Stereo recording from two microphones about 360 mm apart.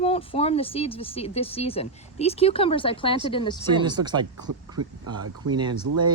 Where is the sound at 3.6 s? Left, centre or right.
Centre.